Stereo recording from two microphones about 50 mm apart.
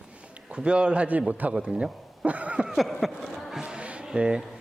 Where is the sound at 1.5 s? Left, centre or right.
Centre.